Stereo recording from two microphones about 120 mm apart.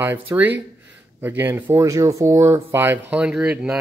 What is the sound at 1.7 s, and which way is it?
Speech, 25° right (ahead or behind).